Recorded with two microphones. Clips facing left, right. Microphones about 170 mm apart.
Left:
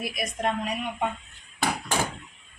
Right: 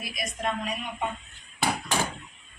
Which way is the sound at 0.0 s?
60° left (ahead or behind).